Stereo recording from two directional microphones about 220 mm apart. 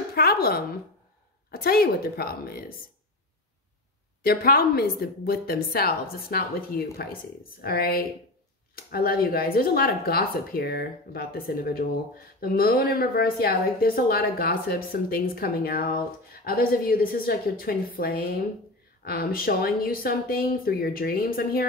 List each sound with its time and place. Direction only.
0.1 s a sound: 45° left (ahead or behind)
1.5 s a woman's voice: 45° left (ahead or behind)
4.2 s a woman's voice: 45° left (ahead or behind)